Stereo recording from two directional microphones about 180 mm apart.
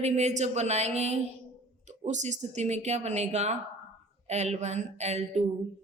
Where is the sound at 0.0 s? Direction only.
40° right (ahead or behind).